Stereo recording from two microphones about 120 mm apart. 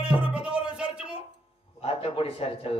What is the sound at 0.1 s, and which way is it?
Music, 10° right (ahead or behind).